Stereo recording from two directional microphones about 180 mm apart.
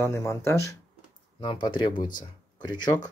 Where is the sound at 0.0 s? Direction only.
15° left (ahead or behind).